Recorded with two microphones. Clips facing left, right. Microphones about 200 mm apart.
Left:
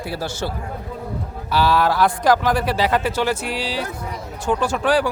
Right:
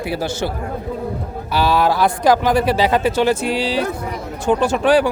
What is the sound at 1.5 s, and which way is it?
Speech, 15° right (ahead or behind).